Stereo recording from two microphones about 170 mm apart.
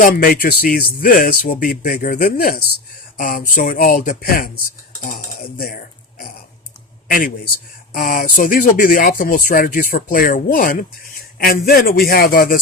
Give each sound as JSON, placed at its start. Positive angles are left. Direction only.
{"t": 0.0, "sound": "speech", "side_deg": 55}
{"t": 7.9, "sound": "speech", "side_deg": 60}